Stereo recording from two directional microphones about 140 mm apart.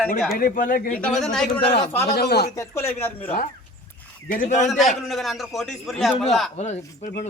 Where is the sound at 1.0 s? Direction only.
5° left (ahead or behind).